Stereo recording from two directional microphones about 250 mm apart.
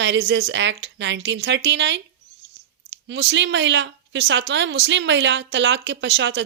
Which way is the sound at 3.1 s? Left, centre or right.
Right.